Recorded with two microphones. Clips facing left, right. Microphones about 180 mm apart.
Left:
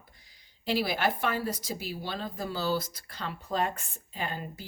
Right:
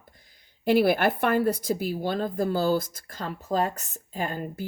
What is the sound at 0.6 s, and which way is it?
Speech, 55° right (ahead or behind).